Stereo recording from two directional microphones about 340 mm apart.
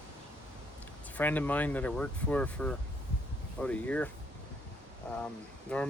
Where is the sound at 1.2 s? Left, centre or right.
Centre.